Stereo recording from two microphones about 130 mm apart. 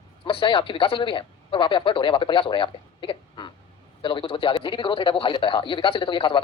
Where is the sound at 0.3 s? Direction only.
40° left (ahead or behind).